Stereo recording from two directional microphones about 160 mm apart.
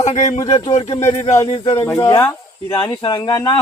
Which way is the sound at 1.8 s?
15° left (ahead or behind).